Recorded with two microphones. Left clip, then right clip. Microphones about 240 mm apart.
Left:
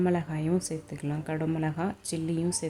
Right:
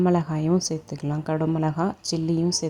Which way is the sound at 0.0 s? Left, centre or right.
Right.